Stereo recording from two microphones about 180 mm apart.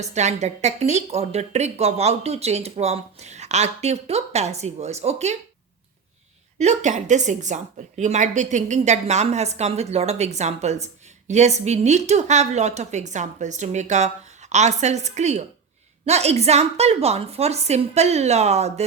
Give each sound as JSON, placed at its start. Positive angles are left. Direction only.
{"t": 0.0, "sound": "a woman's voice", "side_deg": -40}
{"t": 6.6, "sound": "a woman's voice", "side_deg": -40}